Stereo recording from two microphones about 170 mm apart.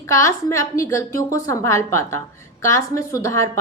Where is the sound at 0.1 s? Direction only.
15° left (ahead or behind).